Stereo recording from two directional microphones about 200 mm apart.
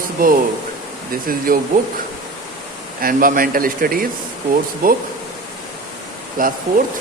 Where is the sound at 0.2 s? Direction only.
45° right (ahead or behind).